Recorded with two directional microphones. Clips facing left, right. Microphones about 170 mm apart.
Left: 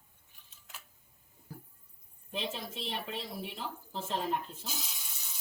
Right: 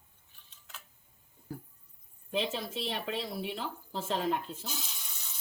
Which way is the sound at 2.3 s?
90° right.